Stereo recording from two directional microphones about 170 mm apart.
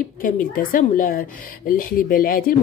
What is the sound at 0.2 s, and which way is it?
A woman's voice, 55° left (ahead or behind).